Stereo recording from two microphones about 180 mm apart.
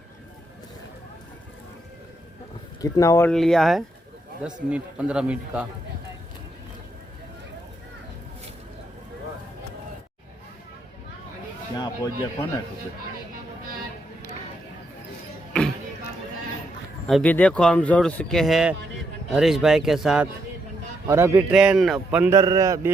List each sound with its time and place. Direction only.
2.8 s speech: 20° left (ahead or behind)
3.3 s a man's voice: centre (ahead or behind)
11.7 s a man's voice: 25° left (ahead or behind)
17.1 s speech: centre (ahead or behind)
21.1 s a man's voice: 15° right (ahead or behind)
21.5 s a man's voice: 5° right (ahead or behind)